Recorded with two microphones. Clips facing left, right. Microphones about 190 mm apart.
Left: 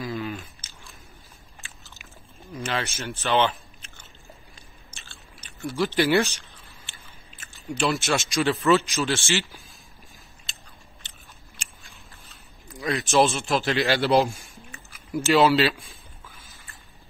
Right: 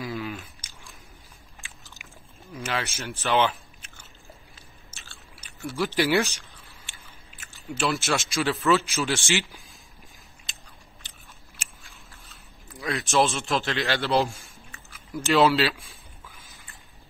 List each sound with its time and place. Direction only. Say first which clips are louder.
0.0 s chewing: left 2 dB; 5° right (ahead or behind)
1.6 s biting: even; 15° right (ahead or behind)
2.5 s a sound: left 1 dB; 10° right (ahead or behind)
3.2 s biting: left 1 dB; 10° right (ahead or behind)
5.6 s speech: left 2 dB; 10° right (ahead or behind)
6.9 s chewing: left 1 dB; 5° right (ahead or behind)
9.0 s speech: left 1 dB; 15° right (ahead or behind)
10.5 s biting: left 1 dB; 15° right (ahead or behind)
11.5 s chewing: left 1 dB; 5° right (ahead or behind); by 15.2 s 15° left (ahead or behind)
15.2 s speech: left 1 dB; centre (ahead or behind)